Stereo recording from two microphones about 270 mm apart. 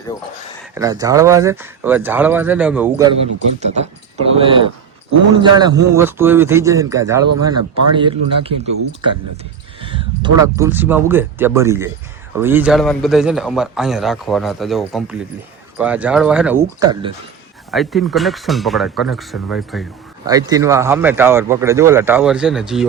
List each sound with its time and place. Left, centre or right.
0.7 s speech: centre
3.6 s speech: right
9.8 s a man's voice: centre
17.7 s a man's voice: centre
20.2 s speech: centre